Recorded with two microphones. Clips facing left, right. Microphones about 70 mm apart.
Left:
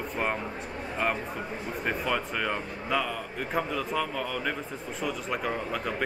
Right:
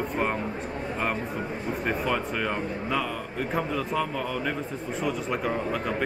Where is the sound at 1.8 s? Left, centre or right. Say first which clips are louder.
Right 1 dB; centre.